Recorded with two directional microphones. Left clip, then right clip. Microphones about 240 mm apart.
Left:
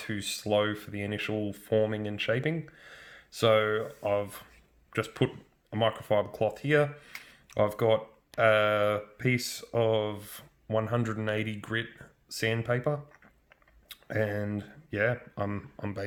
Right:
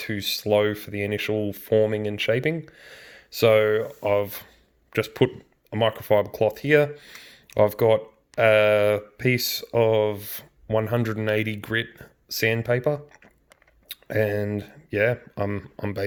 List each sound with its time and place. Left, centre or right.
0.0 s speech: right